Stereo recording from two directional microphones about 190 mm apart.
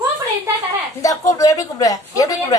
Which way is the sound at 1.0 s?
15° left (ahead or behind).